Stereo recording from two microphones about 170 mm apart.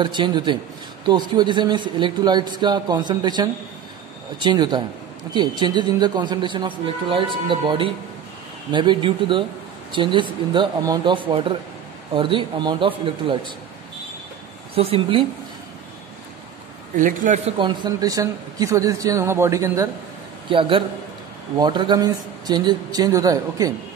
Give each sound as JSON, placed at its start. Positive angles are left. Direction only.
{"t": 0.0, "sound": "a man's voice", "side_deg": -25}
{"t": 14.8, "sound": "speech", "side_deg": -35}
{"t": 16.9, "sound": "a man's voice", "side_deg": -50}
{"t": 17.6, "sound": "a man's voice", "side_deg": -25}
{"t": 20.4, "sound": "a man's voice", "side_deg": -30}